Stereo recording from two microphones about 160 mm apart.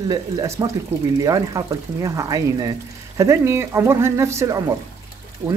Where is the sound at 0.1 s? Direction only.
20° right (ahead or behind).